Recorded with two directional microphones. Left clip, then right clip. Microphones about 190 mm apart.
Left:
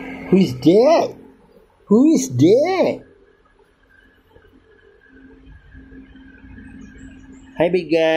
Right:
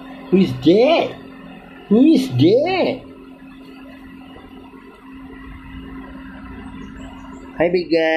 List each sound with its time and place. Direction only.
0.6 s speech: 40° left (ahead or behind)
7.5 s speech: 45° left (ahead or behind)